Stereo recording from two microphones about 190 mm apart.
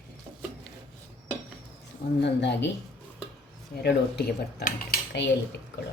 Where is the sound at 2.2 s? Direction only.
65° left (ahead or behind).